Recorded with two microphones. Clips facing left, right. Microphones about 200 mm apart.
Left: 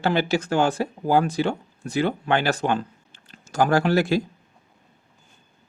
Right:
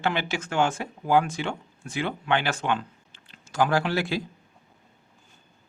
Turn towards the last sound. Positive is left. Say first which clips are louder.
# left 6 dB
turn(degrees=45)  # may be behind; listen again after turning